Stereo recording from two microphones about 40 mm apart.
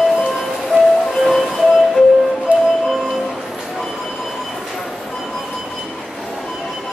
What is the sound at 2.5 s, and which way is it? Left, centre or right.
Music, right.